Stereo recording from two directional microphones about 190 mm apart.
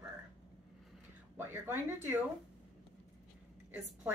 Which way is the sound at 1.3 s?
10° right (ahead or behind).